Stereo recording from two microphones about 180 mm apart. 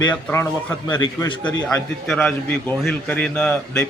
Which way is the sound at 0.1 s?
10° left (ahead or behind).